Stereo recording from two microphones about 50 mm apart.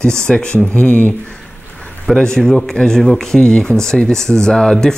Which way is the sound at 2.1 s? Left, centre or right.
Centre.